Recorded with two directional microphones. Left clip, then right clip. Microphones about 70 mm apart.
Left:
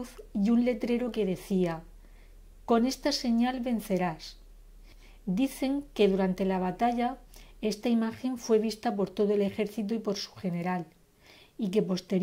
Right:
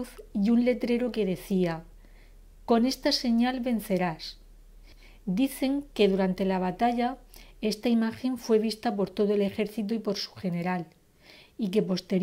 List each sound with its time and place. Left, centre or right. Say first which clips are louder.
0.0 s speech: right 2 dB; right